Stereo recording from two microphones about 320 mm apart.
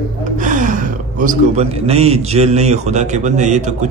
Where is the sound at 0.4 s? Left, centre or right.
Right.